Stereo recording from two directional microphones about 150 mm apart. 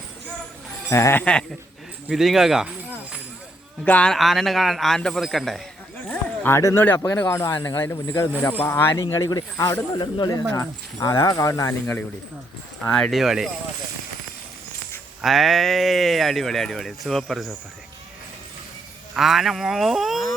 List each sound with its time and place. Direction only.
0.9 s speech: 20° left (ahead or behind)
2.0 s a sound: 5° right (ahead or behind)
3.8 s speech: 5° left (ahead or behind)
6.1 s a sound: 10° left (ahead or behind)
7.0 s speech: 15° left (ahead or behind)
12.8 s speech: 5° left (ahead or behind)
15.2 s speech: centre (ahead or behind)
19.1 s speech: centre (ahead or behind)